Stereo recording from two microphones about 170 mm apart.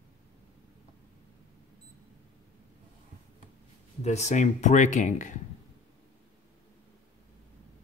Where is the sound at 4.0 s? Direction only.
40° left (ahead or behind).